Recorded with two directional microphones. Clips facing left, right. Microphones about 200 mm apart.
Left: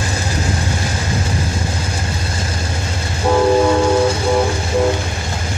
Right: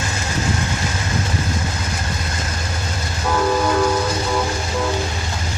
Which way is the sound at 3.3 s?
30° left (ahead or behind).